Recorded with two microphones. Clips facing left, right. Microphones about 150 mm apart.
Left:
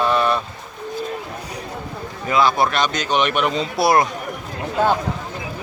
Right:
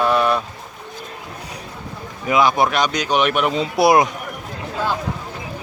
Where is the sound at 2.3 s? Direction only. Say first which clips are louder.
Right 1 dB; 15° right (ahead or behind).